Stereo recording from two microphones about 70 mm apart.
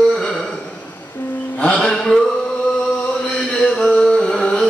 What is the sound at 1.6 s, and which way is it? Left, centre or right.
Music, centre.